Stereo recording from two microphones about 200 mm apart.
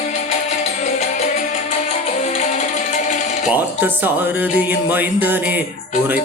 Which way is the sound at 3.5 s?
10° right (ahead or behind).